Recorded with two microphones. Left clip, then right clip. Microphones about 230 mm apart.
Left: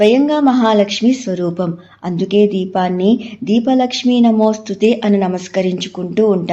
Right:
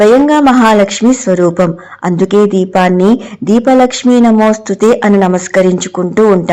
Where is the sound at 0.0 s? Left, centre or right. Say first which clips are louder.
Right 5 dB; right.